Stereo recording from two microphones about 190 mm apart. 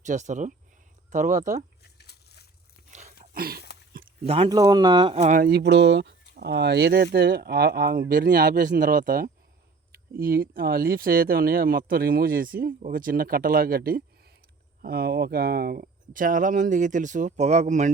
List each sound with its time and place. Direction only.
0.0 s speech: 40° right (ahead or behind)
1.8 s crumpling: 60° left (ahead or behind)
3.3 s speech: 55° right (ahead or behind)
4.3 s speech: 25° right (ahead or behind)
5.4 s speech: 55° right (ahead or behind); by 17.9 s 40° right (ahead or behind)